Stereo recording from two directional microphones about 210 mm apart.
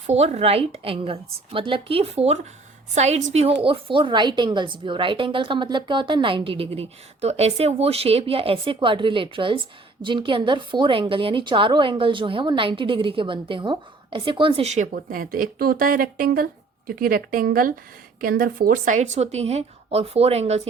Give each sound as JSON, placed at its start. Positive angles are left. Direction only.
{"t": 0.1, "sound": "a woman's voice", "side_deg": -30}